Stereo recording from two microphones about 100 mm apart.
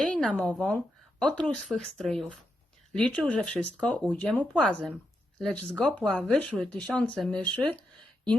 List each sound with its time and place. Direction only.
0.0 s speech: 5° left (ahead or behind)